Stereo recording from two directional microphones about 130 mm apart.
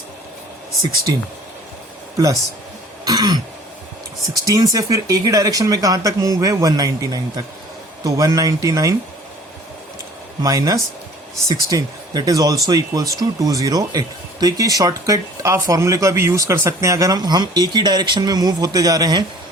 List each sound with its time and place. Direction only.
1.1 s speech: 30° right (ahead or behind)
3.0 s throat clearing: 30° right (ahead or behind)
4.4 s speech: 30° right (ahead or behind)
10.4 s speech: 25° right (ahead or behind)